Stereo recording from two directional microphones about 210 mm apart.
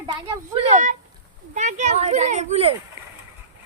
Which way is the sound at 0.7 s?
35° right (ahead or behind).